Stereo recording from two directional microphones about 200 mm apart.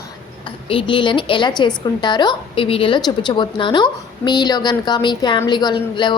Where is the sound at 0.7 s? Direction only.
25° left (ahead or behind).